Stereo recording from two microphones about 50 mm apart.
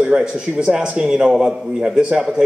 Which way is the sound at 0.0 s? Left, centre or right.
Centre.